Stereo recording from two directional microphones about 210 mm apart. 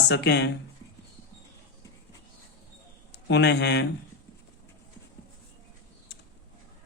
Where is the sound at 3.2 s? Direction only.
55° left (ahead or behind).